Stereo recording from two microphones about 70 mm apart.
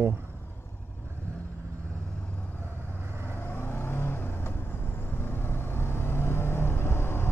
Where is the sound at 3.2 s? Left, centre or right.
Left.